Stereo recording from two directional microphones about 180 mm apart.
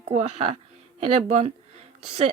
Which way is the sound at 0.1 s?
40° right (ahead or behind).